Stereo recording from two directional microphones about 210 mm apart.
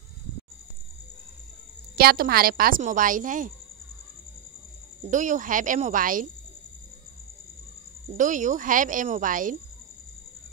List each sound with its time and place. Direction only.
2.0 s speech: 45° right (ahead or behind)
5.1 s speech: 35° right (ahead or behind)
8.1 s speech: 40° right (ahead or behind)